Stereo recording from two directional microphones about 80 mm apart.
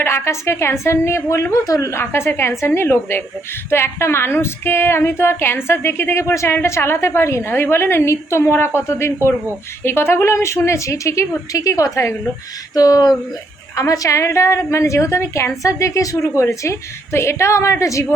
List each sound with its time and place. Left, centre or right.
0.0 s speech: left
12.7 s speech: left